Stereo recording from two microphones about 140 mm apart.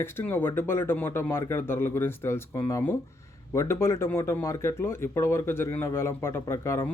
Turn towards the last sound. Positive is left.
turn(degrees=20)  # may be behind; listen again after turning